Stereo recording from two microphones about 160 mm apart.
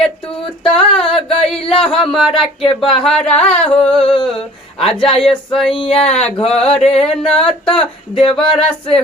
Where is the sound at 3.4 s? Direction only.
40° left (ahead or behind).